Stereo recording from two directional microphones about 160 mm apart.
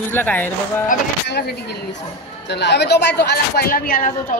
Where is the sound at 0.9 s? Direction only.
90° left; by 4.3 s 60° left (ahead or behind).